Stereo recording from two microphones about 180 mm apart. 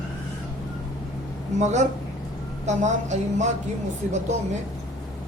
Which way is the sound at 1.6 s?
40° right (ahead or behind).